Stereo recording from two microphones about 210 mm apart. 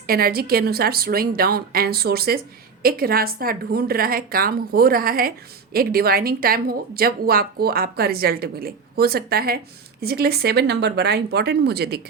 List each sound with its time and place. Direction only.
0.1 s speech: 45° right (ahead or behind)